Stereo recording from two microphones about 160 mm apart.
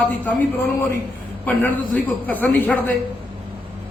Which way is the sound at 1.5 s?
10° left (ahead or behind).